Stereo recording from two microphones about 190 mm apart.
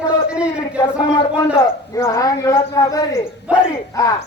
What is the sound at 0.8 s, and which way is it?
Speech, 20° left (ahead or behind).